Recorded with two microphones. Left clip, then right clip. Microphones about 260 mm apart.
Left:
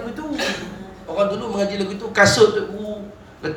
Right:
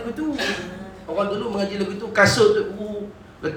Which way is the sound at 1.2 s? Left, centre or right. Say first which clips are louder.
Left 3 dB; left.